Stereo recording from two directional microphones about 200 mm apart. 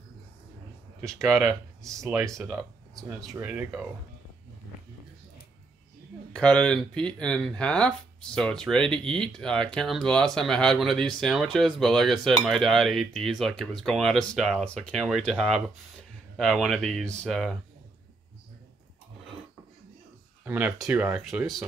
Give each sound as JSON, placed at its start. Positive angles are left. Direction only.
{"t": 1.3, "sound": "speech", "side_deg": -15}
{"t": 3.2, "sound": "speech", "side_deg": -15}
{"t": 6.3, "sound": "speech", "side_deg": 5}
{"t": 20.4, "sound": "speech", "side_deg": -10}